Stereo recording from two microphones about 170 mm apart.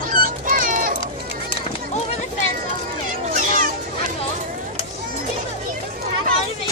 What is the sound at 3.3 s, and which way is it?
Fowl, 55° right (ahead or behind).